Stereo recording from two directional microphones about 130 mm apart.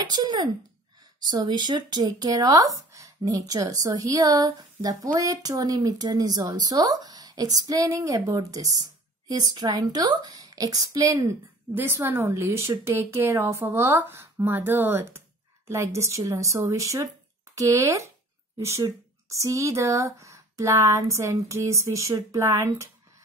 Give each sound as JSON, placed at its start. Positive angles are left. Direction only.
{"t": 0.0, "sound": "speech", "side_deg": -30}